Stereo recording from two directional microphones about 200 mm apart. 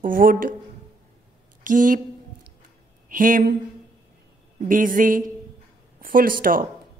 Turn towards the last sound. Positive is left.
turn(degrees=-45)  # may be behind; listen again after turning